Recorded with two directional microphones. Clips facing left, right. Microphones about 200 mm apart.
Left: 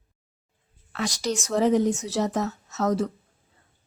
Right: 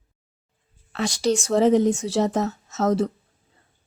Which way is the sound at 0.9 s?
30° right (ahead or behind).